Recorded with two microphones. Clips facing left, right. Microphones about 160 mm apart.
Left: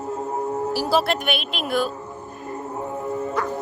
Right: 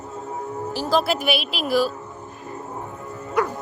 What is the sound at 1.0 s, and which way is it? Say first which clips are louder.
Speech: right 1 dB; 5° right (ahead or behind).